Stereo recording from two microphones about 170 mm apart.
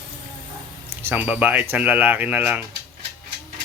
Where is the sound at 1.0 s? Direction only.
10° right (ahead or behind).